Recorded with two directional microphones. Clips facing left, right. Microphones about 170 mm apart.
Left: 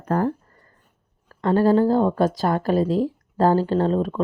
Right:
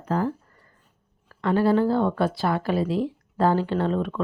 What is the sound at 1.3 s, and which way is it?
Speech, 40° left (ahead or behind).